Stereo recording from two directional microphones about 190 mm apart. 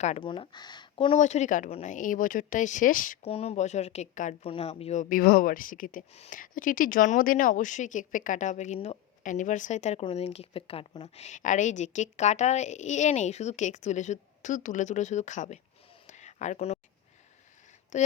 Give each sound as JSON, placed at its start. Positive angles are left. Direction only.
{"t": 0.2, "sound": "speech", "side_deg": 25}
{"t": 1.2, "sound": "speech", "side_deg": 40}
{"t": 3.2, "sound": "speech", "side_deg": 30}
{"t": 16.0, "sound": "a sound", "side_deg": 40}
{"t": 17.9, "sound": "speech", "side_deg": 40}